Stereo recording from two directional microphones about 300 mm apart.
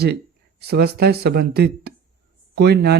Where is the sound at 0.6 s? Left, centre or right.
Right.